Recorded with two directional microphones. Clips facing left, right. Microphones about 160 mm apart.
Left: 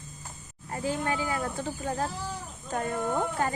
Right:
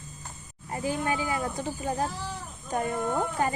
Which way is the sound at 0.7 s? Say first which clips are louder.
Right 1 dB; 15° right (ahead or behind).